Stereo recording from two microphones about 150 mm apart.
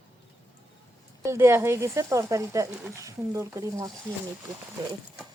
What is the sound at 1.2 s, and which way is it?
Speech, 15° right (ahead or behind).